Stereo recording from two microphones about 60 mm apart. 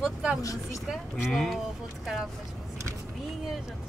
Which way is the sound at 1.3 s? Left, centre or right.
Centre.